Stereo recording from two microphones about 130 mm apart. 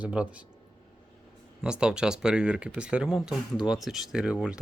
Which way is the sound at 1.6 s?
5° right (ahead or behind).